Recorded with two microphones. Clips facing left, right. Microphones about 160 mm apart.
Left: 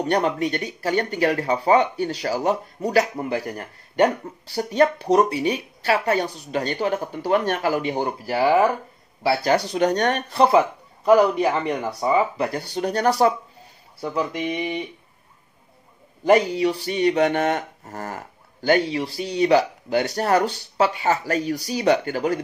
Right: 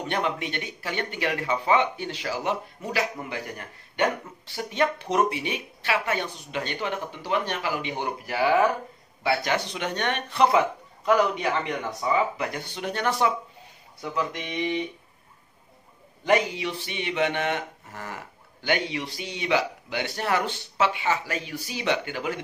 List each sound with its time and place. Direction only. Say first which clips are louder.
0.0 s speech: left 7 dB; 40° left (ahead or behind)
16.3 s speech: left 6 dB; 40° left (ahead or behind)